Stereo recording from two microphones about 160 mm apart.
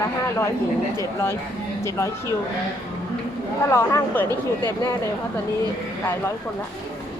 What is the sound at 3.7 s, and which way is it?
Speech, 15° left (ahead or behind).